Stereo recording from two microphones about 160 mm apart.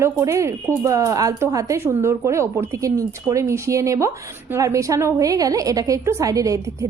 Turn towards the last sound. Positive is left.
turn(degrees=-20)  # may be behind; listen again after turning